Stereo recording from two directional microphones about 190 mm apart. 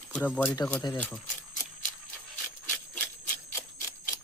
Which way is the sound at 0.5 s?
15° left (ahead or behind).